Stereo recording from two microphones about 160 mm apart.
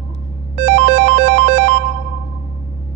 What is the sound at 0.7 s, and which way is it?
Music, 65° right (ahead or behind).